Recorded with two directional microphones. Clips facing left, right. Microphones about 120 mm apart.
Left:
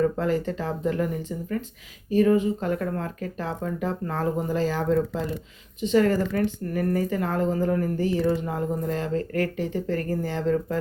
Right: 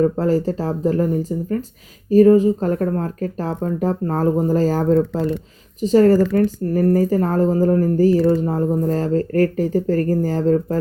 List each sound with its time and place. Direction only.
0.0 s speech: 35° right (ahead or behind)